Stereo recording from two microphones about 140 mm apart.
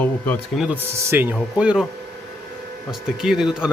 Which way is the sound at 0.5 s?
5° right (ahead or behind).